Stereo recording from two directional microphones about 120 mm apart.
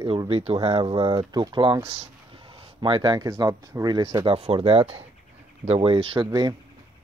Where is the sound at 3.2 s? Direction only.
25° right (ahead or behind).